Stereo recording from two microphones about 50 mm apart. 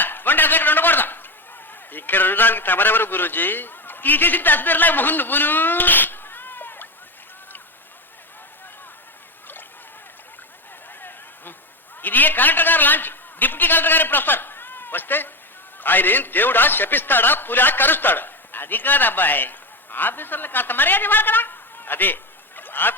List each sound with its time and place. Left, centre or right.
0.0 s a sound: left
1.9 s a man's voice: left
12.0 s a man's voice: left